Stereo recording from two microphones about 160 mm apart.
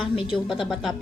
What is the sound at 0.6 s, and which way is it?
Speech, centre (ahead or behind).